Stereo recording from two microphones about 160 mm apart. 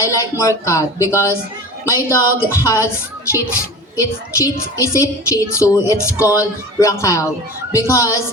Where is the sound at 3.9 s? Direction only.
20° left (ahead or behind).